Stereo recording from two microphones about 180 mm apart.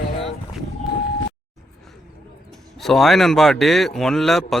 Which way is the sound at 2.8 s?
Centre (ahead or behind).